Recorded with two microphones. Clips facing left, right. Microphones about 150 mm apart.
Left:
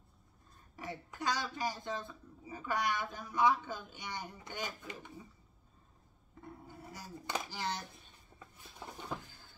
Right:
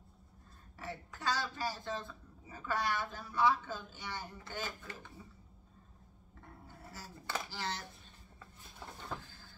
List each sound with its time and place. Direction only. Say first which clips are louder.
0.7 s speech: left 2 dB; 15° left (ahead or behind)
6.4 s cutlery: left 4 dB; 15° left (ahead or behind)
8.4 s a sound: left 2 dB; 15° left (ahead or behind)